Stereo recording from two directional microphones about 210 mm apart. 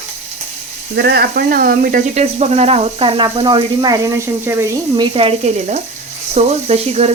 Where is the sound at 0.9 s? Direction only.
50° right (ahead or behind); by 5.0 s 15° right (ahead or behind).